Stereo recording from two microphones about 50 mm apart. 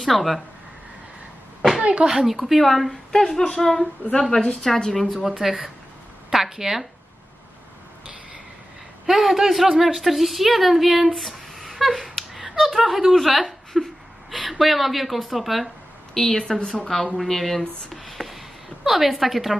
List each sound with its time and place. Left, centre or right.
0.0 s a woman's voice: centre
1.8 s a woman's voice: centre
5.1 s speech: centre
9.0 s a woman's voice: centre
11.6 s a sound: centre
13.7 s a woman's voice: centre
16.4 s a woman's voice: centre